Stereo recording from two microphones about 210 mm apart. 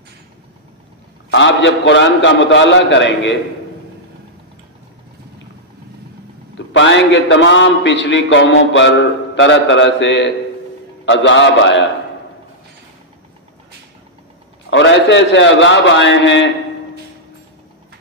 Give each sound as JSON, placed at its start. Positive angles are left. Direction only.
{"t": 1.3, "sound": "a man's voice", "side_deg": 60}
{"t": 6.7, "sound": "a man's voice", "side_deg": 60}
{"t": 14.7, "sound": "a man's voice", "side_deg": 60}